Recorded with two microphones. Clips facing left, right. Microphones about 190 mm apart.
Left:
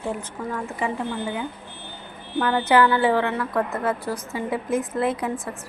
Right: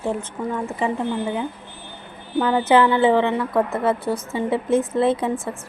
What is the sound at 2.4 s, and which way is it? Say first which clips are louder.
A woman's voice: right 2 dB; 15° right (ahead or behind).